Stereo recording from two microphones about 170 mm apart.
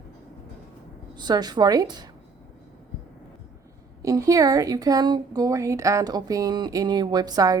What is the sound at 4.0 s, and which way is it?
Speech, 20° right (ahead or behind).